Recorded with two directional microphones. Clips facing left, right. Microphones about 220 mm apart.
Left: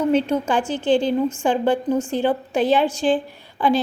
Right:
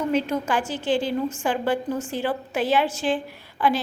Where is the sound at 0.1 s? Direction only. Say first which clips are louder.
Left 4 dB; 30° left (ahead or behind).